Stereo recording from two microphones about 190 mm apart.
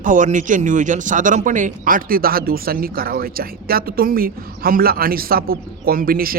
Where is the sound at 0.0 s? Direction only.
40° right (ahead or behind).